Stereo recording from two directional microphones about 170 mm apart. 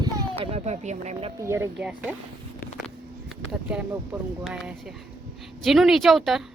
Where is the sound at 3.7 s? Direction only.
5° right (ahead or behind).